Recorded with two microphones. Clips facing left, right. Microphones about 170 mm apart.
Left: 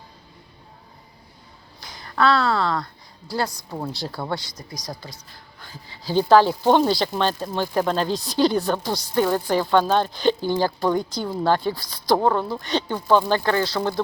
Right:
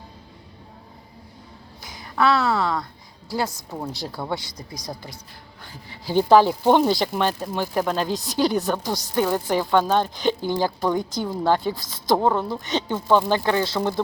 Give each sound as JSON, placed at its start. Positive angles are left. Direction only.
{"t": 2.0, "sound": "a woman's voice", "side_deg": -10}
{"t": 3.3, "sound": "speech", "side_deg": -5}
{"t": 6.1, "sound": "speech", "side_deg": -15}